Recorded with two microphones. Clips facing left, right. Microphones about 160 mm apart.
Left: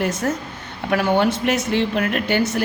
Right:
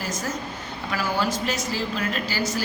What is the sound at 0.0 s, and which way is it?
Speech, 65° left (ahead or behind).